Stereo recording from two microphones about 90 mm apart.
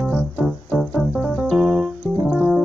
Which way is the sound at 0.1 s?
10° left (ahead or behind).